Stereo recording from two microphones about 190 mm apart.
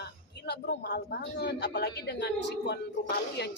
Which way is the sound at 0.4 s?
60° left (ahead or behind).